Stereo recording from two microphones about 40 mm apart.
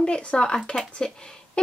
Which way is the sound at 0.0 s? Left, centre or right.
Left.